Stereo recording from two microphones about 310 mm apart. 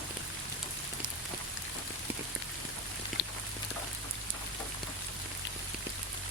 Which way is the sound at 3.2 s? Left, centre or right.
Left.